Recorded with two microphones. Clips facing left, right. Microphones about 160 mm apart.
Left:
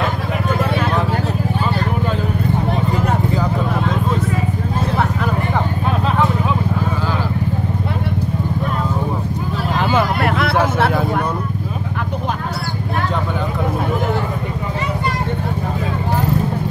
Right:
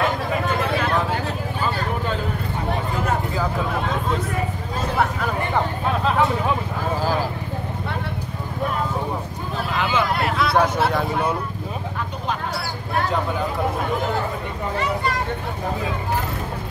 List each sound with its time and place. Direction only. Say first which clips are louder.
9.8 s vehicle: left 4 dB; 50° left (ahead or behind)